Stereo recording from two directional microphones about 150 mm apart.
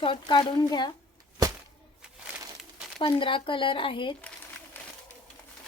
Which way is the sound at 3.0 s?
35° left (ahead or behind).